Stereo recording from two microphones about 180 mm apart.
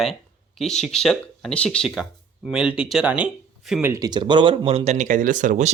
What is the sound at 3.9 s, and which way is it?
Speech, 20° right (ahead or behind).